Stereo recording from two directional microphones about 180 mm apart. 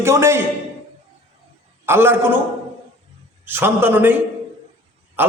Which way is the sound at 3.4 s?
10° right (ahead or behind).